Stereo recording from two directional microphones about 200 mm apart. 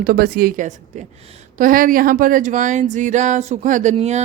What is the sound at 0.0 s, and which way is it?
Speech, 45° right (ahead or behind).